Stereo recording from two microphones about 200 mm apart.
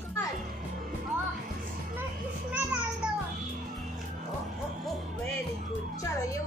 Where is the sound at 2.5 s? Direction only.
5° right (ahead or behind).